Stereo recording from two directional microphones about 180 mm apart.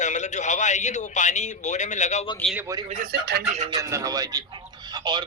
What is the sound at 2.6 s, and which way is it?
Speech, 15° right (ahead or behind).